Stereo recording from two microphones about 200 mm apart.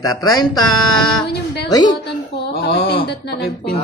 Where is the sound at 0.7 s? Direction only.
90° left.